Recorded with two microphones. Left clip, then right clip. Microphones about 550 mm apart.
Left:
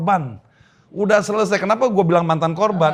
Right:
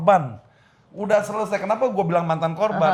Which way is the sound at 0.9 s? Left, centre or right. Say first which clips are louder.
Left 4 dB; left.